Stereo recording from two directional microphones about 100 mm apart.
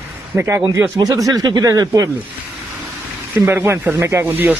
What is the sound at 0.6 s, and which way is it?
Speech, 25° right (ahead or behind).